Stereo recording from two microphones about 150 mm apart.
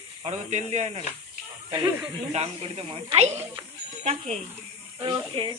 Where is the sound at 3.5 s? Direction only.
45° right (ahead or behind).